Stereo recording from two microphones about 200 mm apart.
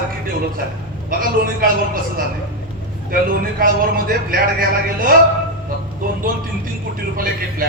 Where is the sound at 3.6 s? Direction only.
45° right (ahead or behind).